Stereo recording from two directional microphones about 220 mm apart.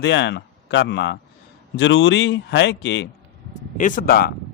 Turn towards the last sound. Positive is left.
turn(degrees=45)  # may be behind; listen again after turning